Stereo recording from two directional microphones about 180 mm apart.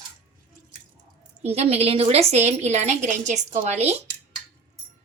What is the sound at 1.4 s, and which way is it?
Speech, 35° right (ahead or behind).